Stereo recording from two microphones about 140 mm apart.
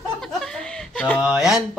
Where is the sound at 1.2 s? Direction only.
5° right (ahead or behind).